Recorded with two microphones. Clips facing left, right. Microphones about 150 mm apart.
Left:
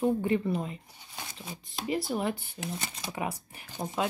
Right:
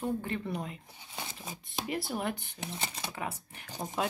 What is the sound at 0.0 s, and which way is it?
Speech, 15° left (ahead or behind).